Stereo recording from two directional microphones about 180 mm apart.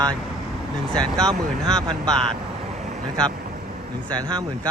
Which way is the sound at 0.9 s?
5° left (ahead or behind).